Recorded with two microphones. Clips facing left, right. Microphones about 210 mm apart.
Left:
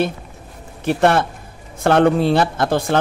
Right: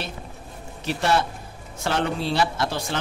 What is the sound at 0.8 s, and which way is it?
A man's voice, 55° left (ahead or behind).